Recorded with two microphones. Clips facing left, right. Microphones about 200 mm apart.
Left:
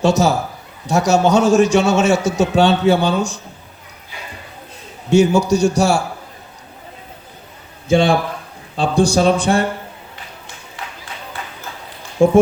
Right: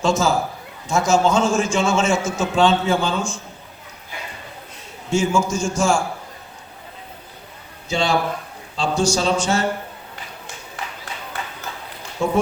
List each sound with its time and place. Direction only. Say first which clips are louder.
0.0 s a man's voice: left 4 dB; 70° left (ahead or behind)
5.3 s a man's voice: left 6 dB; 35° left (ahead or behind)
7.9 s a man's voice: left 7 dB; 55° left (ahead or behind)
8.7 s a sound: left 5 dB; 55° left (ahead or behind)
12.2 s a man's voice: left 9 dB; 50° left (ahead or behind)